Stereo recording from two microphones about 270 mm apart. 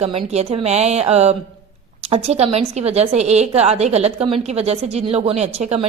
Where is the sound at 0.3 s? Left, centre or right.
Right.